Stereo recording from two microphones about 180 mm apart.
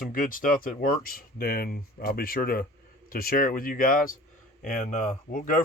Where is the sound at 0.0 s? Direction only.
50° left (ahead or behind).